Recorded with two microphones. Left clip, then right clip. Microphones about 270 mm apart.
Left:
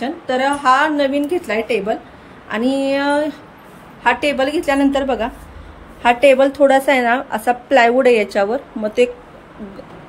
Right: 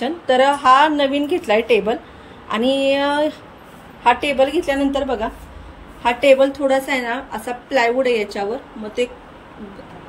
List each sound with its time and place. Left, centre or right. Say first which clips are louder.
0.0 s a woman's voice: right 3 dB; centre